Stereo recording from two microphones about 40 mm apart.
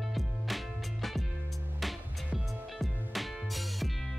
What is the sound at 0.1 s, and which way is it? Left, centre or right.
Music, centre.